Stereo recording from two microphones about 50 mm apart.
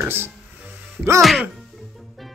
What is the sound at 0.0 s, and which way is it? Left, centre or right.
Music, right.